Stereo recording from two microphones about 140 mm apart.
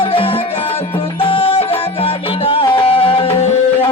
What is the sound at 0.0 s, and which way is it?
Music, 40° left (ahead or behind).